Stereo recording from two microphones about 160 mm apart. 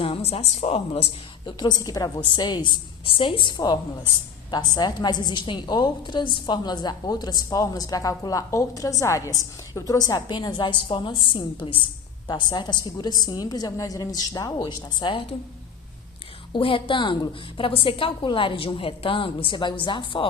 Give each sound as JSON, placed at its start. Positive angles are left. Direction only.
{"t": 0.0, "sound": "a woman's voice", "side_deg": 40}
{"t": 1.5, "sound": "a woman's voice", "side_deg": 25}
{"t": 16.5, "sound": "a woman's voice", "side_deg": 35}